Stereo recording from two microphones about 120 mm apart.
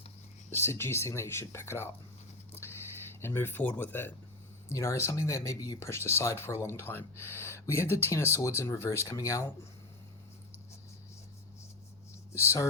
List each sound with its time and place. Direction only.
0.5 s speech: 20° left (ahead or behind)
2.6 s a sound: 20° left (ahead or behind)
3.1 s speech: 20° left (ahead or behind)
12.3 s speech: 20° left (ahead or behind)